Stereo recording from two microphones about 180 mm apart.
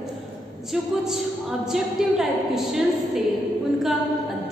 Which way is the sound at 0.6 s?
Centre (ahead or behind).